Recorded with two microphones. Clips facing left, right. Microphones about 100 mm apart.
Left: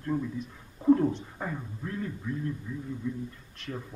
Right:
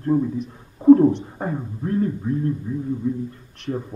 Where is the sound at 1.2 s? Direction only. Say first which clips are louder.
Right 8 dB; 30° right (ahead or behind).